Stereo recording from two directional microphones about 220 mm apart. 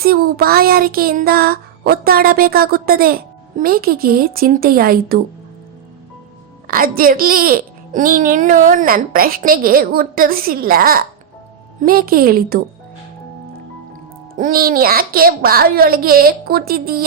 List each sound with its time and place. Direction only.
0.0 s child singing: 45° right (ahead or behind)
6.7 s a child's voice: 40° right (ahead or behind)
14.3 s child singing: 40° right (ahead or behind)